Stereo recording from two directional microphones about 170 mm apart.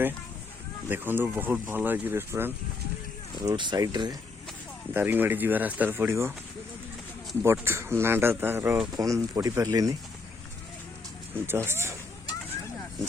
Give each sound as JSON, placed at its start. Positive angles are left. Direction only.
{"t": 0.9, "sound": "speech", "side_deg": -10}
{"t": 3.3, "sound": "speech", "side_deg": -25}
{"t": 4.9, "sound": "speech", "side_deg": -10}
{"t": 7.4, "sound": "speech", "side_deg": -15}
{"t": 11.4, "sound": "speech", "side_deg": -15}